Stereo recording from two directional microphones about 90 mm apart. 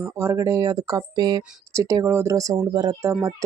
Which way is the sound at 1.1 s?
50° right (ahead or behind).